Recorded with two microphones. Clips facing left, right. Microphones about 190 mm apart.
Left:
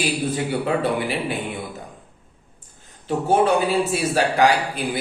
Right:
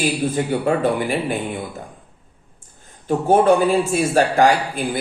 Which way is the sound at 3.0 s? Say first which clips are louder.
Right 4 dB; 50° right (ahead or behind).